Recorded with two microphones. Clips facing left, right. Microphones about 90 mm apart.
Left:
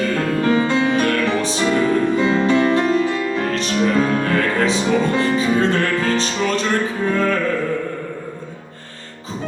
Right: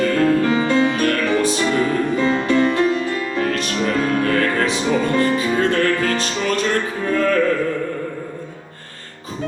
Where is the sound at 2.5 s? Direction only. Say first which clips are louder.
Right 1 dB; 20° left (ahead or behind).